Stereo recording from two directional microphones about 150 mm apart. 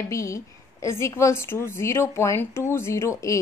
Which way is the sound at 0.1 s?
20° left (ahead or behind).